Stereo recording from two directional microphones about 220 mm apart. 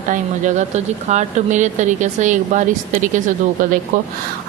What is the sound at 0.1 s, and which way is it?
Speech, 35° right (ahead or behind).